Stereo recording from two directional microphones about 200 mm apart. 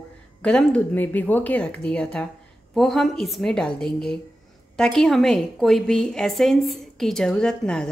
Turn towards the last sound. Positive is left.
turn(degrees=5)  # may be behind; listen again after turning